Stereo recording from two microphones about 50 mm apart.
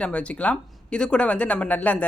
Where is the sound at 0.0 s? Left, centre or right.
Left.